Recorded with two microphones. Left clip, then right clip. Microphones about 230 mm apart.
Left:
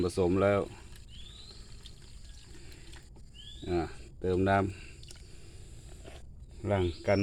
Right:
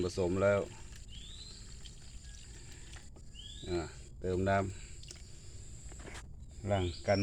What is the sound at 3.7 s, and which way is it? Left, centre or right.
Speech, left.